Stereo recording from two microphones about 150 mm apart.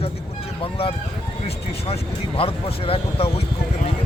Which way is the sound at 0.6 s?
40° left (ahead or behind).